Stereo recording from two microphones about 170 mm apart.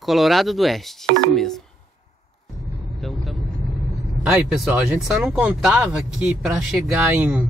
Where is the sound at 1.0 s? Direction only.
90° right.